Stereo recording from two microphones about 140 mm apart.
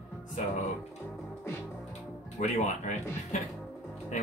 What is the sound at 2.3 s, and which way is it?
Speech, 60° left (ahead or behind).